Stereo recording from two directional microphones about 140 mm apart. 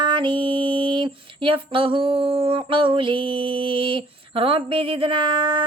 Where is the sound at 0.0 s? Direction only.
35° right (ahead or behind).